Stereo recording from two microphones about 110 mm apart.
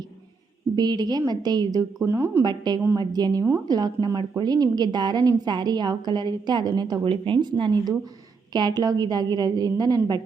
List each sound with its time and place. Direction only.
0.8 s a woman's voice: 40° right (ahead or behind)
2.0 s a woman's voice: 20° right (ahead or behind)
2.4 s a woman's voice: 40° right (ahead or behind)
7.0 s a woman's voice: 50° right (ahead or behind); by 10.0 s 35° right (ahead or behind)